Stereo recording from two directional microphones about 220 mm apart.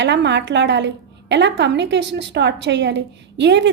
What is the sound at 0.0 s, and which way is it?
A woman's voice, 50° right (ahead or behind).